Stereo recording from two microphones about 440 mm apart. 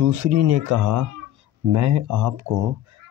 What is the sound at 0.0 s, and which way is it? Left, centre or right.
Speech, right.